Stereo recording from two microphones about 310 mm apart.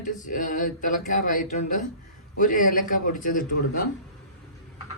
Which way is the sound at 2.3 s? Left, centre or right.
Left.